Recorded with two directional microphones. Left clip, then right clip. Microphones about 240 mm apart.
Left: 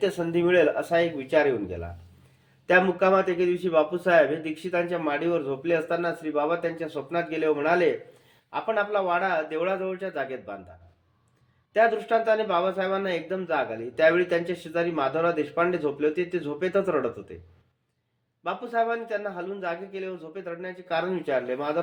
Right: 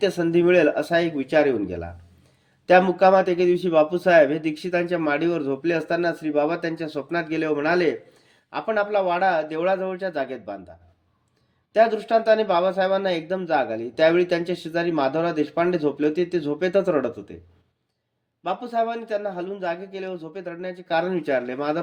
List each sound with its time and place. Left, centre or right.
0.0 s speech: right
2.6 s speech: right
11.7 s speech: right
18.4 s speech: right